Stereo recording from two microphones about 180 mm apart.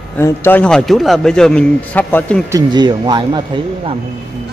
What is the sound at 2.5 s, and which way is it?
Speech, 20° right (ahead or behind).